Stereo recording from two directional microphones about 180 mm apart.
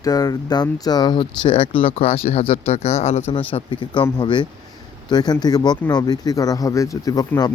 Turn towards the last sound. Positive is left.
turn(degrees=20)  # may be behind; listen again after turning